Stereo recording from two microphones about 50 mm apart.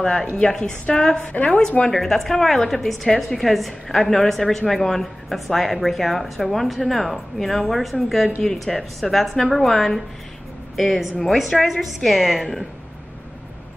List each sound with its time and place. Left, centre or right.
0.0 s a woman's voice: centre; by 1.6 s left
1.9 s a woman's voice: centre